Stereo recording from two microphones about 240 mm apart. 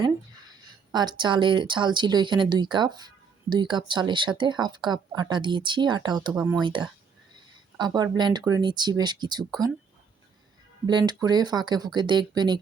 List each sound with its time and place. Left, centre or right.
0.9 s speech: centre
6.3 s speech: centre
6.6 s speech: centre
10.8 s speech: centre